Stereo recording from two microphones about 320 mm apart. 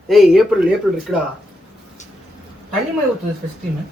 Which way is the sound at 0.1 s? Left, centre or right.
Centre.